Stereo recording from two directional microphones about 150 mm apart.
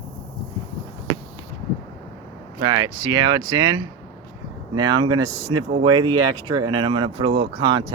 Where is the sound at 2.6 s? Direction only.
30° right (ahead or behind).